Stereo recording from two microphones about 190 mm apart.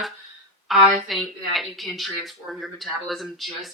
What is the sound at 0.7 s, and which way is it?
Speech, centre (ahead or behind).